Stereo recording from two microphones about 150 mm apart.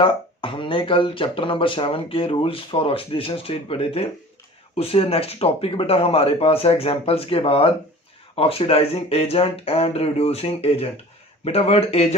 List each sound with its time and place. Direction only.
0.0 s speech: 35° left (ahead or behind)